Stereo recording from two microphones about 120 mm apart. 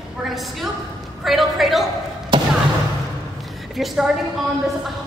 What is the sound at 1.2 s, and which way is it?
Speech, centre (ahead or behind).